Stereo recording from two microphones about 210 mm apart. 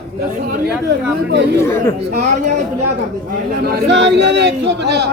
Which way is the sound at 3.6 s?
50° right (ahead or behind).